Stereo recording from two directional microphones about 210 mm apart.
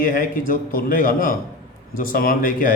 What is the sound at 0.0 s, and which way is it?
A man's voice, 40° left (ahead or behind).